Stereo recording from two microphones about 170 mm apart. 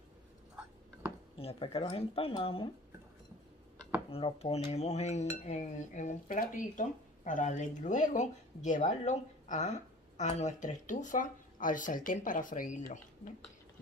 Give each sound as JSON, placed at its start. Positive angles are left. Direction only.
{"t": 1.4, "sound": "speech", "side_deg": 35}
{"t": 4.1, "sound": "speech", "side_deg": 35}